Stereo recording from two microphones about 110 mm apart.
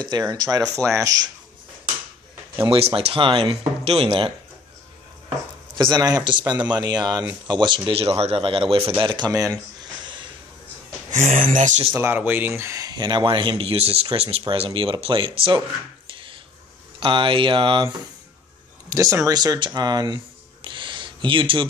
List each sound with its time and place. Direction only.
0.1 s speech: 30° right (ahead or behind)
2.7 s speech: 60° right (ahead or behind)
5.8 s a man's voice: 40° right (ahead or behind)
11.1 s speech: 90° right
11.9 s a man's voice: 20° right (ahead or behind); by 15.6 s 55° right (ahead or behind)
16.1 s a sound: 50° right (ahead or behind)
17.0 s a man's voice: 55° right (ahead or behind)
18.9 s speech: 30° right (ahead or behind)
20.6 s a sound: 45° right (ahead or behind)